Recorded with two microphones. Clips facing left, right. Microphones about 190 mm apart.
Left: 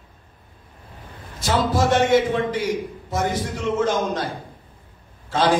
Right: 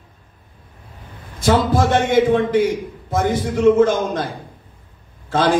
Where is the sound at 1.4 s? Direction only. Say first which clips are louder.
Right 4 dB; 55° right (ahead or behind).